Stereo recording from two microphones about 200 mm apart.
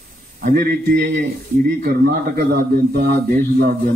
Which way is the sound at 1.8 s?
45° right (ahead or behind).